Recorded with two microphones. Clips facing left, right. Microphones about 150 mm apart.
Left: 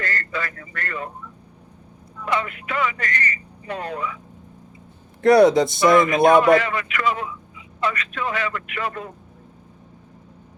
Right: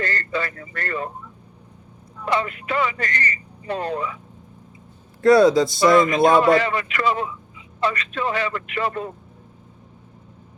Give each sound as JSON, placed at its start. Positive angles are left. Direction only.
{"t": 0.0, "sound": "speech", "side_deg": -30}
{"t": 2.2, "sound": "speech", "side_deg": -30}
{"t": 5.2, "sound": "a man's voice", "side_deg": 20}
{"t": 5.9, "sound": "speech", "side_deg": -25}